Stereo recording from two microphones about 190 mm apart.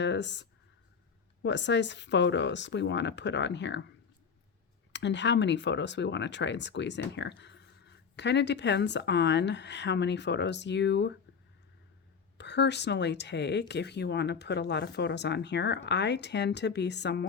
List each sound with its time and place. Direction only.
0.0 s speech: 65° left (ahead or behind)
4.9 s speech: 70° left (ahead or behind)
12.4 s speech: 65° left (ahead or behind)